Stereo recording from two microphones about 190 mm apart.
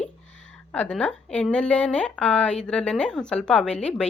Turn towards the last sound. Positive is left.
turn(degrees=5)  # may be behind; listen again after turning